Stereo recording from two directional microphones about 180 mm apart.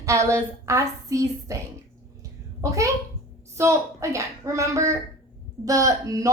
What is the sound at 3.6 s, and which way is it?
Speech, 15° right (ahead or behind).